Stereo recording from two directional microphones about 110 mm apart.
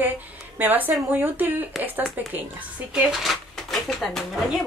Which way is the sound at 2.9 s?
5° right (ahead or behind).